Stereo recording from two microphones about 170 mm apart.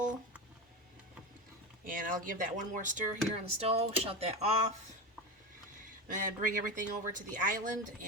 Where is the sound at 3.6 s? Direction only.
35° right (ahead or behind).